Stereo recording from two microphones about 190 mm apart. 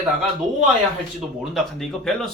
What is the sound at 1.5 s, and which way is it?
Speech, centre (ahead or behind).